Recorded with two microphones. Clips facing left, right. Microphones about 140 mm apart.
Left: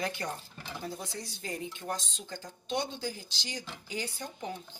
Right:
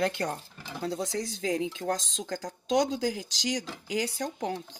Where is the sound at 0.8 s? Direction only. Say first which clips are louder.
Right 10 dB; 90° right.